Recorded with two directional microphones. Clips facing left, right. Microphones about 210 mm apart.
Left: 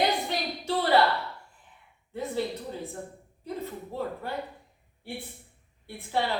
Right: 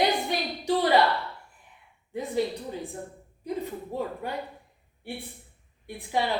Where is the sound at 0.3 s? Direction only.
15° right (ahead or behind).